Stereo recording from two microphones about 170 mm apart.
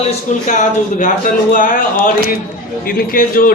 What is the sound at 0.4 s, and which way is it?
Speech, 50° left (ahead or behind).